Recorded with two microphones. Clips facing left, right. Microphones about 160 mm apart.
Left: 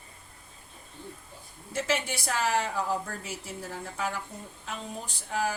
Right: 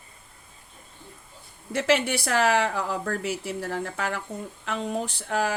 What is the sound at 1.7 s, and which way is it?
Speech, 70° right (ahead or behind).